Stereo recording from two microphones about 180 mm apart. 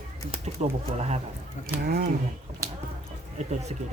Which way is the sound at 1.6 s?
60° right (ahead or behind).